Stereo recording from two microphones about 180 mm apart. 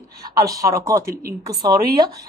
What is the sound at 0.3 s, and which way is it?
Speech, 20° right (ahead or behind).